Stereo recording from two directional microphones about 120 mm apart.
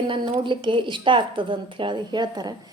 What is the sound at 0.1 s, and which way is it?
Speech, 45° right (ahead or behind).